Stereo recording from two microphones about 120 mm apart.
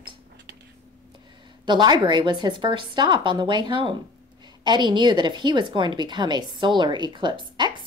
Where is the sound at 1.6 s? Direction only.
35° right (ahead or behind).